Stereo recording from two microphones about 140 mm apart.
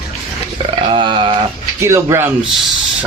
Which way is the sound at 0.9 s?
35° right (ahead or behind).